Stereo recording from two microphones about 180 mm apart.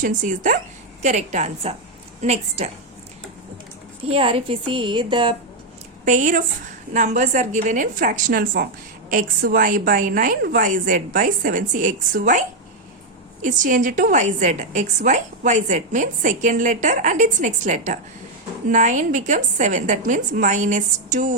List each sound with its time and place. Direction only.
0.0 s a woman's voice: 45° right (ahead or behind)
4.1 s a woman's voice: 30° right (ahead or behind)
6.1 s a woman's voice: 45° right (ahead or behind)